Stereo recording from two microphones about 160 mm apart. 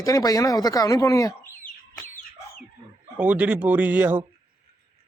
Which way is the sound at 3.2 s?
10° right (ahead or behind).